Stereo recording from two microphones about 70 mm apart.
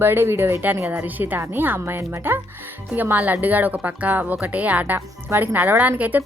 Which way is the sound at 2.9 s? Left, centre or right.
Right.